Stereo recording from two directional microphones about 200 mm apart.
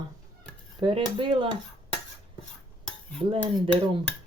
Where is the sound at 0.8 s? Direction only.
25° right (ahead or behind).